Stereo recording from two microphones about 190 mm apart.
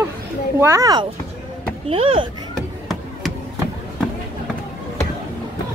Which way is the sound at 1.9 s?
30° right (ahead or behind).